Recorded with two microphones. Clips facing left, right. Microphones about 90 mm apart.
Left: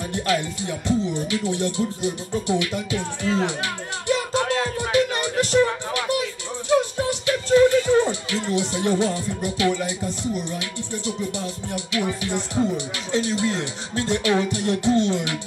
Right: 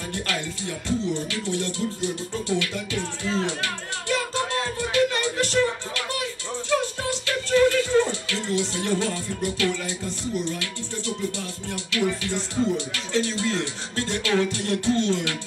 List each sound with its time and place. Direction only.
0.1 s music: 20° left (ahead or behind)